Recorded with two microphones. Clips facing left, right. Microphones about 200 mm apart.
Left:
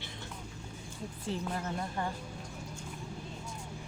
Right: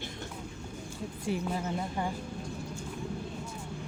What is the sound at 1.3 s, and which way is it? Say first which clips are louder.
Speech: right 4 dB; 10° right (ahead or behind).